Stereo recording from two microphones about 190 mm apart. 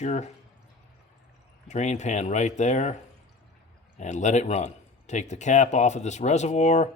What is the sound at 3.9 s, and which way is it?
Speech, 40° left (ahead or behind).